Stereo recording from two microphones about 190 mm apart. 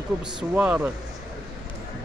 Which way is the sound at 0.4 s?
5° right (ahead or behind).